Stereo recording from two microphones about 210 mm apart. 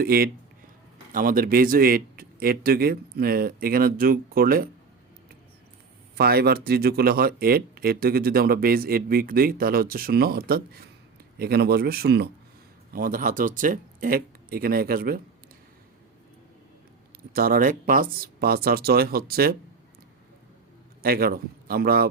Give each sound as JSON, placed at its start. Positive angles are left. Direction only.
{"t": 0.0, "sound": "speech", "side_deg": -45}
{"t": 6.1, "sound": "speech", "side_deg": -50}
{"t": 17.3, "sound": "speech", "side_deg": -45}
{"t": 21.0, "sound": "speech", "side_deg": -45}